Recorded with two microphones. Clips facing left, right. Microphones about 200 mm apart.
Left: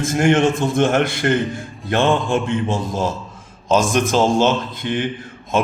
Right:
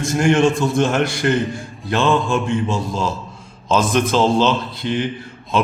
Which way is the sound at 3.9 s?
45° left (ahead or behind).